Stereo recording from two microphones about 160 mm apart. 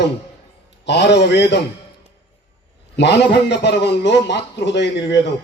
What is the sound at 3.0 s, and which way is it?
A man's voice, 90° left.